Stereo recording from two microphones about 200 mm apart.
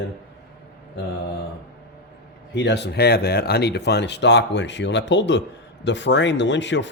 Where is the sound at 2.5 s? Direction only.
60° left (ahead or behind).